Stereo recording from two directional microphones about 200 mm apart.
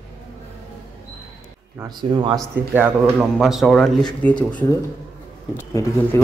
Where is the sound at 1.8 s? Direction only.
20° right (ahead or behind).